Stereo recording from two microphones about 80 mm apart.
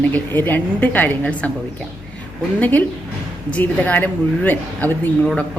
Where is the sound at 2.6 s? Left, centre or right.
Left.